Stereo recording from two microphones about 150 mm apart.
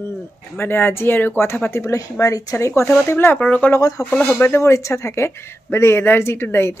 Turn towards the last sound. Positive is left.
turn(degrees=15)  # may be behind; listen again after turning